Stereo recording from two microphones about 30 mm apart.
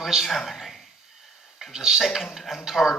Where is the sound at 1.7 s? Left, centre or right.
Centre.